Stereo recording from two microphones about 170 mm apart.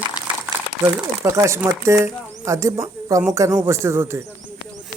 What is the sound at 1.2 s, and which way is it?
A man's voice, 15° right (ahead or behind).